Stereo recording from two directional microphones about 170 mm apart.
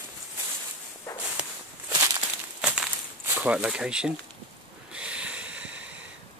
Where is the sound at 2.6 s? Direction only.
5° right (ahead or behind).